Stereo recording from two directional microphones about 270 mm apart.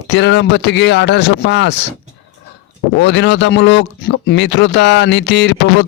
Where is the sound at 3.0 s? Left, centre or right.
Left.